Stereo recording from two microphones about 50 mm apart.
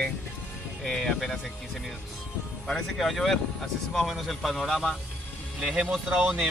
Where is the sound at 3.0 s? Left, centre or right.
Centre.